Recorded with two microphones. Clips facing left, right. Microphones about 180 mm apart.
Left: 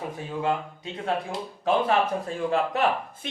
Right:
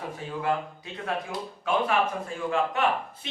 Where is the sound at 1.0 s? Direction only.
30° left (ahead or behind).